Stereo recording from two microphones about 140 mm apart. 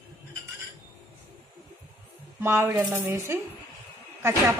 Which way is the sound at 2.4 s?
15° right (ahead or behind).